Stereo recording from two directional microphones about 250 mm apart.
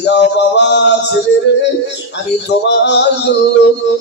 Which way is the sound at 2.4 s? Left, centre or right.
Left.